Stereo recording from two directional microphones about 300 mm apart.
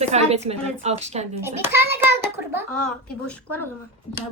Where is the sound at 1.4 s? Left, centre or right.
Centre.